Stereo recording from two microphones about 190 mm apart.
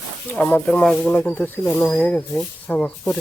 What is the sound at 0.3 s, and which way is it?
Speech, 10° left (ahead or behind).